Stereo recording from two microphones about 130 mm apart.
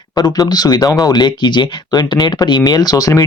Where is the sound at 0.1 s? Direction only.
30° left (ahead or behind).